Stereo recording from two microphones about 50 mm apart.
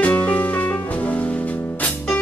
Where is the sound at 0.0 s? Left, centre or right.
Left.